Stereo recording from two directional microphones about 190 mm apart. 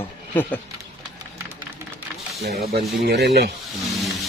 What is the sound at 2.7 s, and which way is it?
Speech, 60° right (ahead or behind).